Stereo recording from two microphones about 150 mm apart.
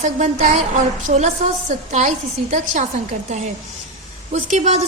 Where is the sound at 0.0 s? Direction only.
50° right (ahead or behind).